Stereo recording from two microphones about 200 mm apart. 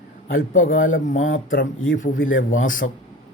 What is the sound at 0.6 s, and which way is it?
Speech, 75° left (ahead or behind).